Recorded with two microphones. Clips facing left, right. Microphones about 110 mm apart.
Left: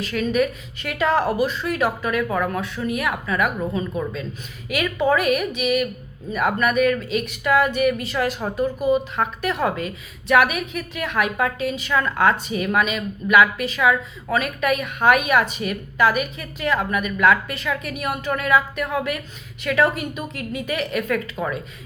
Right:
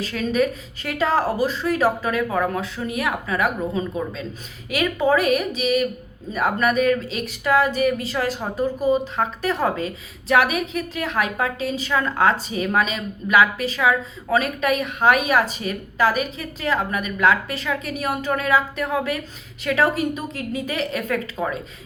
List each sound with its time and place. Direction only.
0.0 s speech: 35° right (ahead or behind)